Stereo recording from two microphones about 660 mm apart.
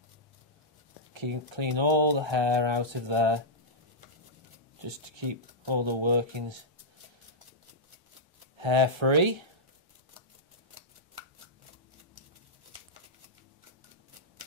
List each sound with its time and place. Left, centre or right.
1.1 s speech: right
4.8 s speech: right
8.5 s speech: right